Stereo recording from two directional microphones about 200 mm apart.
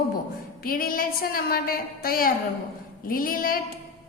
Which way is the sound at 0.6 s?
45° left (ahead or behind).